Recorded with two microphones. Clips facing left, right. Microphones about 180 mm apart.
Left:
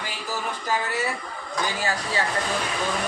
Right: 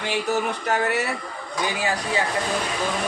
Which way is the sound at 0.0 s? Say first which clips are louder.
Right 7 dB; 70° right (ahead or behind).